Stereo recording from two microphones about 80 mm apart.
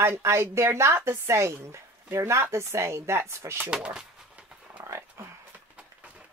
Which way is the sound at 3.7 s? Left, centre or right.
Centre.